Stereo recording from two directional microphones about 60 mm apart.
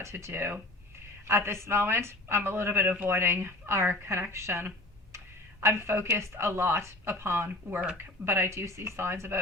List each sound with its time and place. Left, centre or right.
0.0 s a woman's voice: right